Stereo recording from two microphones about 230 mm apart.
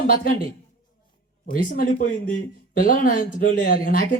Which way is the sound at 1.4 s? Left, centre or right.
Left.